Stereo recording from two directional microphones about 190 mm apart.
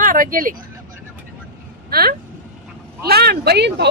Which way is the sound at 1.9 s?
50° right (ahead or behind).